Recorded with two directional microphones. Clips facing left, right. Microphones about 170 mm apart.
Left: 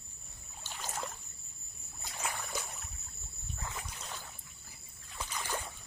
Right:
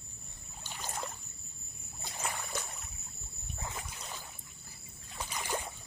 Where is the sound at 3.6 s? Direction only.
20° right (ahead or behind).